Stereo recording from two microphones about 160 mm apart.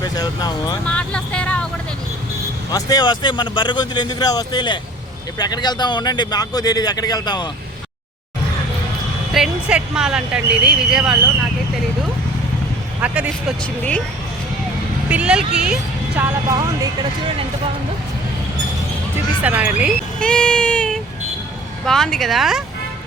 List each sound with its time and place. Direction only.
0.0 s speech: 25° left (ahead or behind)
0.9 s vehicle: 5° left (ahead or behind)
2.6 s speech: 25° left (ahead or behind)
9.3 s speech: 5° right (ahead or behind)
13.0 s speech: 10° right (ahead or behind)
15.1 s speech: 5° right (ahead or behind); by 17.1 s 20° right (ahead or behind)
19.4 s speech: 10° right (ahead or behind)
20.1 s speech: 5° left (ahead or behind)